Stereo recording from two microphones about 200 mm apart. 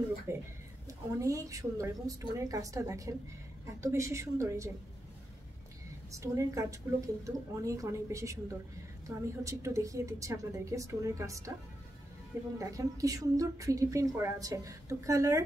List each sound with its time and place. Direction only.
0.3 s speech: 10° right (ahead or behind)
6.1 s speech: 15° right (ahead or behind)
12.5 s speech: 15° right (ahead or behind)